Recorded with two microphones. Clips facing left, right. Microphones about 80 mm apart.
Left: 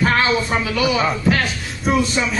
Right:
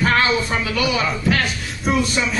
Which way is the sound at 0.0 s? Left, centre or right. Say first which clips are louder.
Even; centre.